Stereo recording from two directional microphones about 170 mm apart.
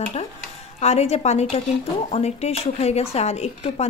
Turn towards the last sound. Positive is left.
turn(degrees=40)  # may be behind; listen again after turning